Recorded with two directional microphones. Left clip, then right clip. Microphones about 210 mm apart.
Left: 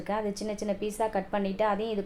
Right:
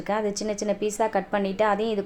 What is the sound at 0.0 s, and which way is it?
A woman's voice, 35° right (ahead or behind).